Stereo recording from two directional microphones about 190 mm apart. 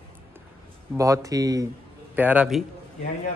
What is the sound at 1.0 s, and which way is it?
Speech, 15° right (ahead or behind).